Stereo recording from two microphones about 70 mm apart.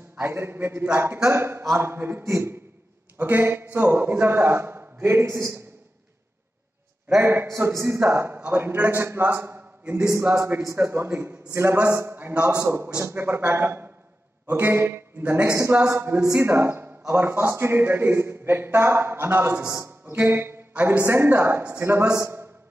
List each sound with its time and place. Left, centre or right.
0.3 s a man's voice: right
7.2 s a man's voice: right
9.9 s a man's voice: right
15.5 s a man's voice: right